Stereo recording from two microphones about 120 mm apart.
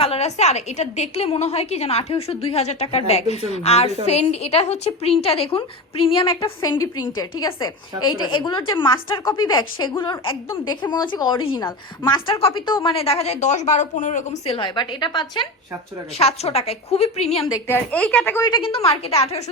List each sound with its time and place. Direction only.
0.0 s a woman's voice: 55° left (ahead or behind)
6.6 s a woman's voice: 30° left (ahead or behind); by 14.5 s 80° left
14.5 s a woman's voice: 40° left (ahead or behind)
16.1 s a woman's voice: 60° left (ahead or behind)
17.4 s a woman's voice: 25° left (ahead or behind)
17.9 s speech: 10° left (ahead or behind)
18.4 s a woman's voice: 45° left (ahead or behind)